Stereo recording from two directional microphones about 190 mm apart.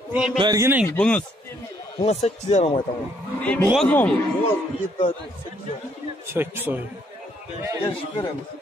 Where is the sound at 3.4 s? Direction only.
5° left (ahead or behind).